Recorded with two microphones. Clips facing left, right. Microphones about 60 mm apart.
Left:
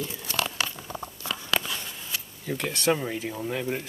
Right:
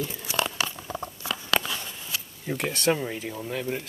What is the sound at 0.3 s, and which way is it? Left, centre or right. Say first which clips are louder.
Crumpling: right 2 dB; centre.